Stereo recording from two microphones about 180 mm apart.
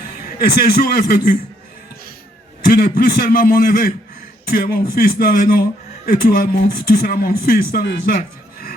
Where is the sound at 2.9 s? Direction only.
50° left (ahead or behind).